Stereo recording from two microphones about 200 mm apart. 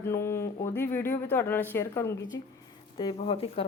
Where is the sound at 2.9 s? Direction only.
25° left (ahead or behind).